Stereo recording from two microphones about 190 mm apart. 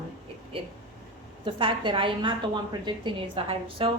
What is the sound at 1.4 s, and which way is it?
A woman's voice, 25° right (ahead or behind).